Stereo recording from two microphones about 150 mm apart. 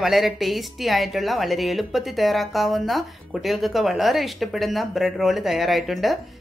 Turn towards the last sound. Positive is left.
turn(degrees=0)  # may be behind; listen again after turning